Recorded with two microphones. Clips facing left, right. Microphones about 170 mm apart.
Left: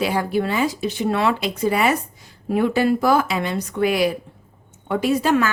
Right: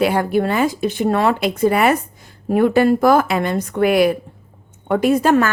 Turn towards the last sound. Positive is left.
turn(degrees=-50)  # may be behind; listen again after turning